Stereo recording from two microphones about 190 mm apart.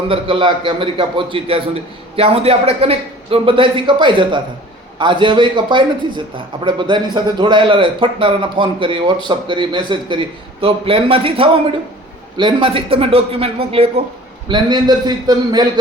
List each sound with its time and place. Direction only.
0.1 s a man's voice: 25° right (ahead or behind)